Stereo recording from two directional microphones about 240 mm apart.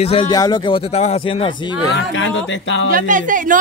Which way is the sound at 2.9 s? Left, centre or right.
Right.